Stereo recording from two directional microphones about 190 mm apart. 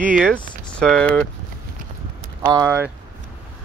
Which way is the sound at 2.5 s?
15° right (ahead or behind).